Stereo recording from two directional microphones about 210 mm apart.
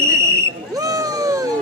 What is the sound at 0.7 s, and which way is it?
Cat, 15° right (ahead or behind).